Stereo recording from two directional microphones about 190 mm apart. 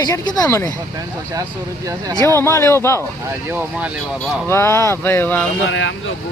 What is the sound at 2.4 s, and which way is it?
Speech, 15° left (ahead or behind).